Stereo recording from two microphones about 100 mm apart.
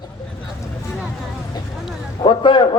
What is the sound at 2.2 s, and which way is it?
Speech, 55° left (ahead or behind).